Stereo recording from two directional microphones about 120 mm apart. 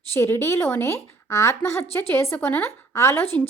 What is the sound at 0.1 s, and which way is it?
A woman's voice, 20° left (ahead or behind).